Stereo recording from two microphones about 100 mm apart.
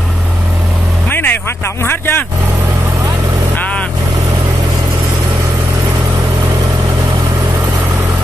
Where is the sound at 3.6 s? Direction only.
15° left (ahead or behind).